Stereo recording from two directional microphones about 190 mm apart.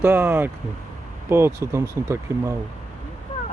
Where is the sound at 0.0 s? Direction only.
10° right (ahead or behind).